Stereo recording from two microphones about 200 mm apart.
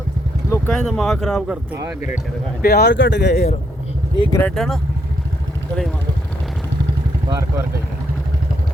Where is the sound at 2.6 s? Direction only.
55° left (ahead or behind).